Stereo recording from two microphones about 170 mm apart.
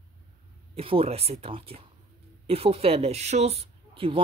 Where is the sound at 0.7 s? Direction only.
35° right (ahead or behind).